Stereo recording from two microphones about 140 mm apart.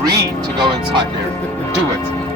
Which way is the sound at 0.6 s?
35° right (ahead or behind).